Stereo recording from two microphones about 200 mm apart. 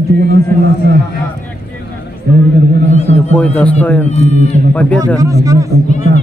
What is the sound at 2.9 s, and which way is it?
Speech, 35° left (ahead or behind).